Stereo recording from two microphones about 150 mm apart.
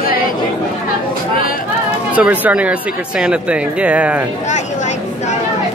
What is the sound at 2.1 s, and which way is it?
Speech, 10° right (ahead or behind).